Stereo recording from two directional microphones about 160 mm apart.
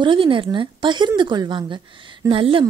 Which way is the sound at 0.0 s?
30° right (ahead or behind).